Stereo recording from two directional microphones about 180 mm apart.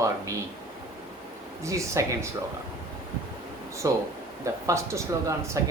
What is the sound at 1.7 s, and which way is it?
Speech, 15° right (ahead or behind).